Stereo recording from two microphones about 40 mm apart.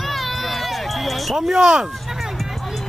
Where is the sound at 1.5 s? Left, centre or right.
Centre.